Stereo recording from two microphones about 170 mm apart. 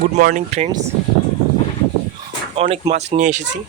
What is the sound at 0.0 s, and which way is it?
Speech, 55° right (ahead or behind).